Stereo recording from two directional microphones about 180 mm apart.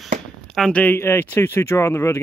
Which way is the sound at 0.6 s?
5° left (ahead or behind).